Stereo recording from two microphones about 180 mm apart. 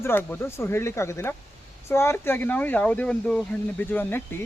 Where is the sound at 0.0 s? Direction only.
10° left (ahead or behind).